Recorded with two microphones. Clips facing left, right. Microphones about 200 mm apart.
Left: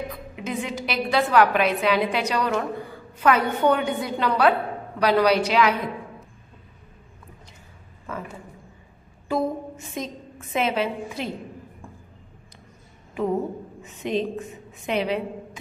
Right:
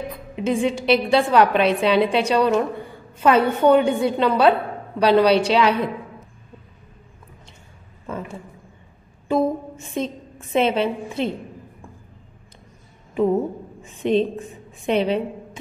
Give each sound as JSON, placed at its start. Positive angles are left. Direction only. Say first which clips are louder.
{"t": 0.4, "sound": "a woman's voice", "louder": "right 8 dB", "side_deg": -25}
{"t": 9.3, "sound": "a woman's voice", "louder": "right 4 dB", "side_deg": -25}
{"t": 13.8, "sound": "a woman's voice", "louder": "right 6 dB", "side_deg": -30}